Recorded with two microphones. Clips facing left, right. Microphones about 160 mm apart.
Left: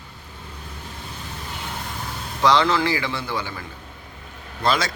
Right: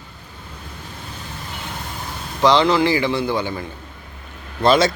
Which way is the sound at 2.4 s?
20° right (ahead or behind).